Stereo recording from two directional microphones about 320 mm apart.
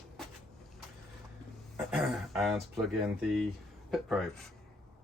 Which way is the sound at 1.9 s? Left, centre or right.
Centre.